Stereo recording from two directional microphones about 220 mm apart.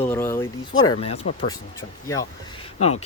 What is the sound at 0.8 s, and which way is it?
Speech, 25° left (ahead or behind).